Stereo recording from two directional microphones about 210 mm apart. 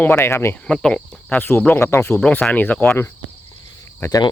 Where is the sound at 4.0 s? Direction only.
15° left (ahead or behind).